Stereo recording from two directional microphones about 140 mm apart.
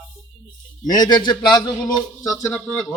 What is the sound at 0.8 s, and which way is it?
Speech, 30° left (ahead or behind).